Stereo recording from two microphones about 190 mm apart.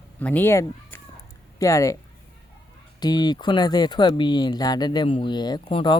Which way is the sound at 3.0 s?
20° left (ahead or behind).